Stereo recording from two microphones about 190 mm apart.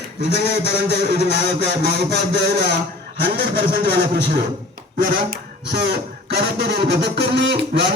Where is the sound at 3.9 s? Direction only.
60° right (ahead or behind).